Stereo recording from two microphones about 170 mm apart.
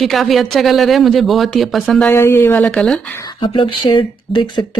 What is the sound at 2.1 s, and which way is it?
Speech, 15° left (ahead or behind).